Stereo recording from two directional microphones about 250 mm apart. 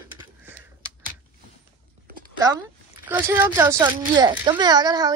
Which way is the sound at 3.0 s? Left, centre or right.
Centre.